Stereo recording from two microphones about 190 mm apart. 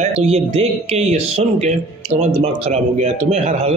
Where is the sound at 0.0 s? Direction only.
35° right (ahead or behind).